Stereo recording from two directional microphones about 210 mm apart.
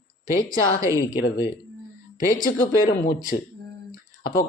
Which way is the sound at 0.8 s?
15° left (ahead or behind).